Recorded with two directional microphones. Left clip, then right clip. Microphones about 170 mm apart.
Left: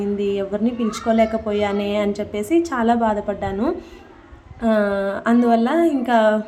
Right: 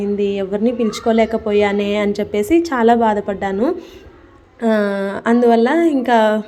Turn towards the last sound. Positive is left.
turn(degrees=-25)  # may be behind; listen again after turning